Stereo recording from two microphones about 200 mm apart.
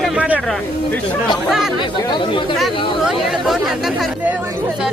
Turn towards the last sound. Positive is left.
turn(degrees=0)  # may be behind; listen again after turning